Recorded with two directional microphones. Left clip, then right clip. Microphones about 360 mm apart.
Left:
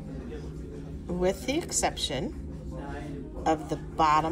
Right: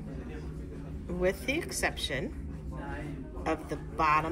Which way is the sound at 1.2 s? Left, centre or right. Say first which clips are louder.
Left 2 dB; centre.